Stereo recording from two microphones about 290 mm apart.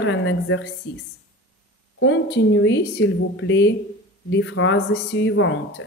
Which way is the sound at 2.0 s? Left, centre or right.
Left.